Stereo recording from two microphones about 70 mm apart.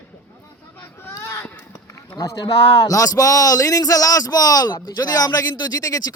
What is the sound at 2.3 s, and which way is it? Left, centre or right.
Speech, left.